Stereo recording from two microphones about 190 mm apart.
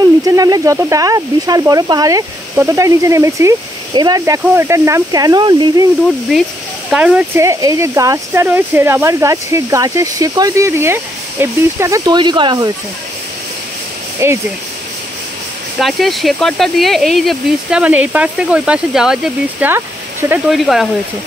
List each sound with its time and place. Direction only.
0.2 s speech: 20° right (ahead or behind)
6.9 s speech: 5° right (ahead or behind); by 12.7 s 25° right (ahead or behind)
14.2 s speech: 15° right (ahead or behind)
15.8 s speech: centre (ahead or behind)
20.4 s speech: centre (ahead or behind)